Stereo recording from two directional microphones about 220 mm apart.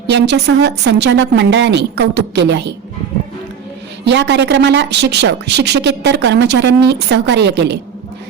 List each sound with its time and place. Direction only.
0.1 s a woman's voice: 50° right (ahead or behind)
4.0 s a woman's voice: 55° right (ahead or behind)